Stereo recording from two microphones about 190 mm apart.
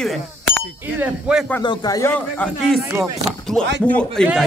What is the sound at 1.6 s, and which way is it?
Speech, 20° left (ahead or behind).